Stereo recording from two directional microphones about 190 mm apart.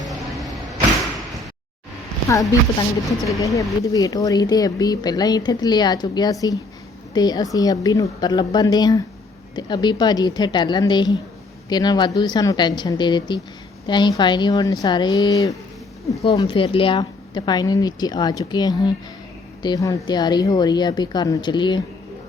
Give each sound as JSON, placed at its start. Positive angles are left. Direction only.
{"t": 0.1, "sound": "vehicle", "side_deg": 0}
{"t": 2.3, "sound": "a woman's voice", "side_deg": 15}